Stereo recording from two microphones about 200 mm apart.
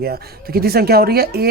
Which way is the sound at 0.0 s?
50° right (ahead or behind).